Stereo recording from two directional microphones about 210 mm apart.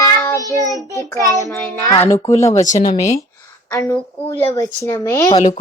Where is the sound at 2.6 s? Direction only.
35° left (ahead or behind).